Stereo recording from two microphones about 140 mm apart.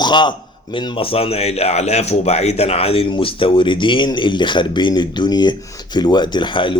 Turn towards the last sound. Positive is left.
turn(degrees=35)  # may be behind; listen again after turning